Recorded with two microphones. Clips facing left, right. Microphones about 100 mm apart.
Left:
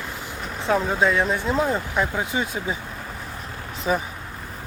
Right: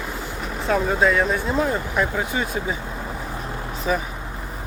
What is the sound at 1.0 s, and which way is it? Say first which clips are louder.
Speech: right 2 dB; 20° left (ahead or behind).